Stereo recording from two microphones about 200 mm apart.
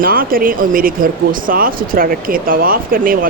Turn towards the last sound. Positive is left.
turn(degrees=-45)  # may be behind; listen again after turning